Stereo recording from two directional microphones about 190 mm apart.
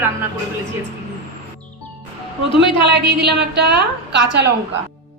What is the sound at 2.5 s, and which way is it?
A woman's voice, 65° right (ahead or behind).